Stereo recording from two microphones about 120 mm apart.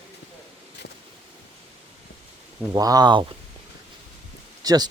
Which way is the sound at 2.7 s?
30° right (ahead or behind).